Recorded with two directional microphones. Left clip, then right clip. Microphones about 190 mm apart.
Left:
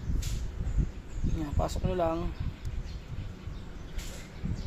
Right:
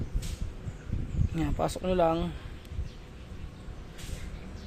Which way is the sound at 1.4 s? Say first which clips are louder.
Right 3 dB; 50° right (ahead or behind).